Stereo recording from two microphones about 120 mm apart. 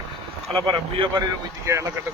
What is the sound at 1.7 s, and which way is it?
Speech, 30° right (ahead or behind).